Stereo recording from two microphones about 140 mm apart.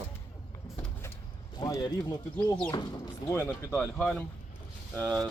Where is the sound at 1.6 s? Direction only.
25° left (ahead or behind).